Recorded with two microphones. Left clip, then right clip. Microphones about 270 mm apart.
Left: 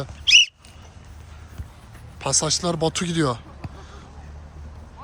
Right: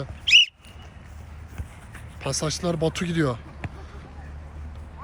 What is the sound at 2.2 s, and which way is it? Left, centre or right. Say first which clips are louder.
Speech: left 5 dB; centre.